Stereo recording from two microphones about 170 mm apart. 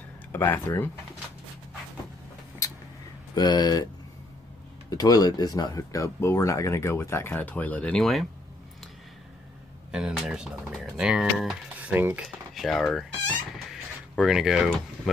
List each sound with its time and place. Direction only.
0.3 s speech: 10° left (ahead or behind)
3.3 s speech: 25° left (ahead or behind)
4.8 s speech: 20° left (ahead or behind); by 8.3 s centre (ahead or behind)
9.8 s speech: 5° right (ahead or behind)
13.7 s a sound: centre (ahead or behind)